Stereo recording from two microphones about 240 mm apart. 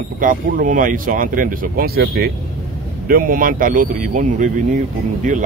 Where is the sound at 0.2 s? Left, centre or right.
Right.